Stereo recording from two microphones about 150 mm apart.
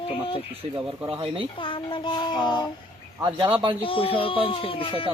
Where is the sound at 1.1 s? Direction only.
35° right (ahead or behind).